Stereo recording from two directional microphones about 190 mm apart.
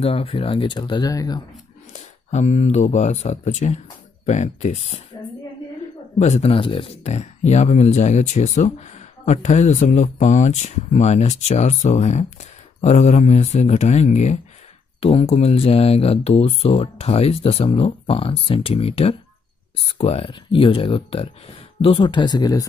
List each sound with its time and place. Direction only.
0.0 s speech: 30° left (ahead or behind)
2.3 s speech: 35° left (ahead or behind)
6.1 s speech: 35° left (ahead or behind); by 22.7 s 20° left (ahead or behind)